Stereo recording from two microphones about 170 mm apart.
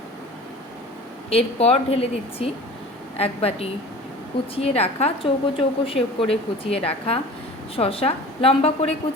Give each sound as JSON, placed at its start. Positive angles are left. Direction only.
{"t": 1.3, "sound": "a woman's voice", "side_deg": 35}